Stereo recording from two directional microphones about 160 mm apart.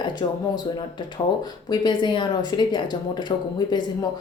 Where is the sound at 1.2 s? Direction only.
30° left (ahead or behind).